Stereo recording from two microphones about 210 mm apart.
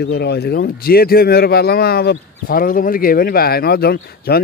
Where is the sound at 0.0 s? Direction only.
50° left (ahead or behind).